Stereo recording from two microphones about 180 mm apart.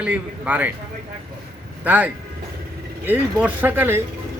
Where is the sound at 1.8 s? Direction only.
10° right (ahead or behind).